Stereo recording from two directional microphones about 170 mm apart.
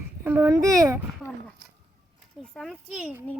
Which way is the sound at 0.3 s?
15° right (ahead or behind).